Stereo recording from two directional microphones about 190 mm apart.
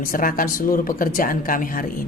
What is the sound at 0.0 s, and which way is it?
Speech, 45° left (ahead or behind).